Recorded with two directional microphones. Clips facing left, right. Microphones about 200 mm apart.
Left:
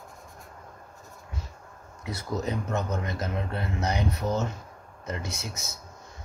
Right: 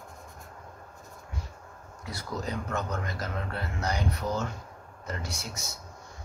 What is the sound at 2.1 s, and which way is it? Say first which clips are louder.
A man's voice: left 4 dB; 20° left (ahead or behind).